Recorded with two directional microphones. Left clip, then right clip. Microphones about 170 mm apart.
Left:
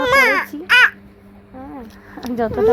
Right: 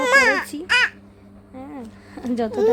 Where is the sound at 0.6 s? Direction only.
20° right (ahead or behind).